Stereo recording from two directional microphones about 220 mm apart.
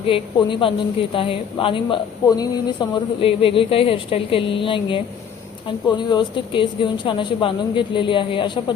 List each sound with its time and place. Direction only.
0.1 s speech: 20° left (ahead or behind)